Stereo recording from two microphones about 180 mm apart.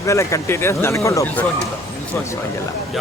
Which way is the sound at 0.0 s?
15° left (ahead or behind).